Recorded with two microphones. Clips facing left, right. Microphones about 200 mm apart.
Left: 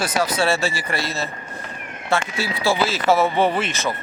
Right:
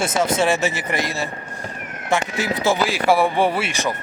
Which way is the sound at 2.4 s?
20° right (ahead or behind).